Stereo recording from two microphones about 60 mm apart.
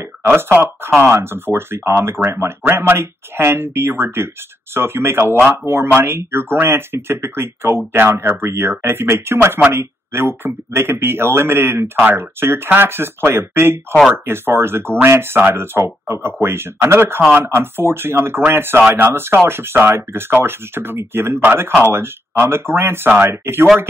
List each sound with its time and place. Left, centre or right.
0.2 s speech: right